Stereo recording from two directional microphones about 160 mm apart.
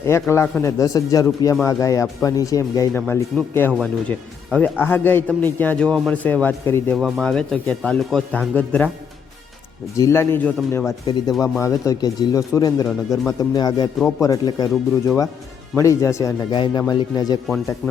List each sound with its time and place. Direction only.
0.0 s speech: 15° left (ahead or behind)
6.9 s speech: centre (ahead or behind)
10.0 s speech: 15° left (ahead or behind)
11.0 s speech: 30° left (ahead or behind)
11.4 s speech: 15° left (ahead or behind)